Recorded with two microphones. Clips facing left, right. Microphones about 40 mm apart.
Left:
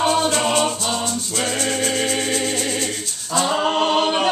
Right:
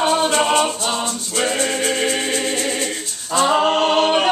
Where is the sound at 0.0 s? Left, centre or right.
Centre.